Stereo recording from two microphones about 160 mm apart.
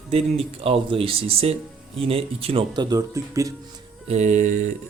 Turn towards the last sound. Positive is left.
turn(degrees=-50)  # may be behind; listen again after turning